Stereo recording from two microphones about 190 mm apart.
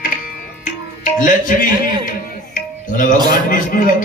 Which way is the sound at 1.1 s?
45° left (ahead or behind).